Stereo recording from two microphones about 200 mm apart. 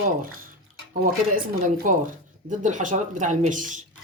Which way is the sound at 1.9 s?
40° right (ahead or behind).